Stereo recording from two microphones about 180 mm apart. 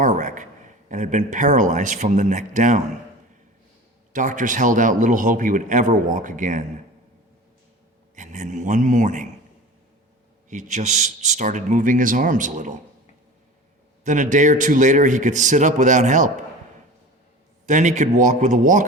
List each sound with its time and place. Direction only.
0.0 s a sound: 45° right (ahead or behind)
0.9 s a man's voice: 45° right (ahead or behind)
4.1 s a man's voice: 45° right (ahead or behind)
8.1 s a man's voice: 45° right (ahead or behind)
10.5 s a man's voice: 45° right (ahead or behind)
14.0 s a man's voice: 45° right (ahead or behind)
17.7 s a man's voice: 45° right (ahead or behind)